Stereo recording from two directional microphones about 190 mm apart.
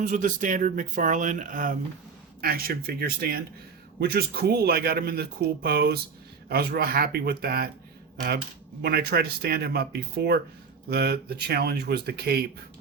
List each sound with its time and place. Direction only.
0.0 s speech: 45° right (ahead or behind)
8.8 s speech: 55° right (ahead or behind)